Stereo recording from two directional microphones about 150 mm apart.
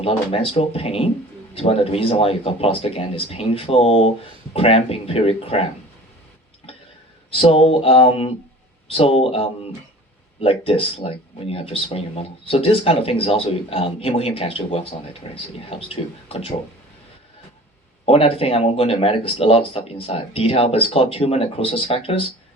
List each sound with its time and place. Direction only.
0.0 s speech: 40° left (ahead or behind)
7.4 s speech: 40° left (ahead or behind)
18.0 s speech: 40° left (ahead or behind)